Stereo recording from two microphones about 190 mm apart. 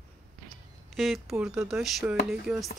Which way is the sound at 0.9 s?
Centre (ahead or behind).